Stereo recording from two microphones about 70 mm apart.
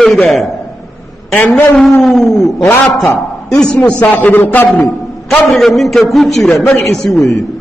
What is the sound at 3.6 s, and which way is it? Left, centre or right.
A man's voice, centre.